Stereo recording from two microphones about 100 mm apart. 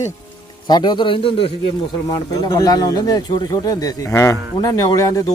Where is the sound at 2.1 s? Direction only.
35° left (ahead or behind).